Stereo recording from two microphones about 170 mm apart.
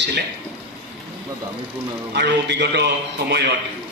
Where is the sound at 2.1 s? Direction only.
85° right.